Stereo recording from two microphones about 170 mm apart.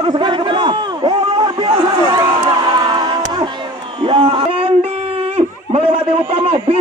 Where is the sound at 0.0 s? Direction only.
25° right (ahead or behind).